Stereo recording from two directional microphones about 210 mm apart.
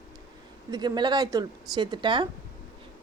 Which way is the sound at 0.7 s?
20° right (ahead or behind).